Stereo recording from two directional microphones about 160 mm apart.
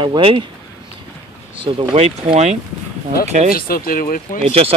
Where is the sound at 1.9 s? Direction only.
45° right (ahead or behind).